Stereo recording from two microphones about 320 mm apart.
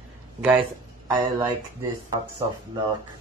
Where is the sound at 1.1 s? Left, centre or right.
Centre.